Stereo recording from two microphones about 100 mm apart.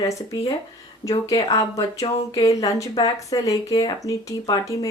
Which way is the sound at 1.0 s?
35° left (ahead or behind).